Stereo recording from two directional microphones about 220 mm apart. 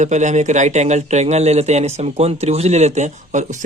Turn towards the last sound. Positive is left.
turn(degrees=-35)  # may be behind; listen again after turning